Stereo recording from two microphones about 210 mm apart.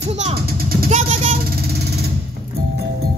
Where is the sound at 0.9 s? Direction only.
35° right (ahead or behind).